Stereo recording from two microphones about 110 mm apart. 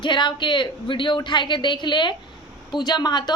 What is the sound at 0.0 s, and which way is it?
A woman's voice, 45° left (ahead or behind).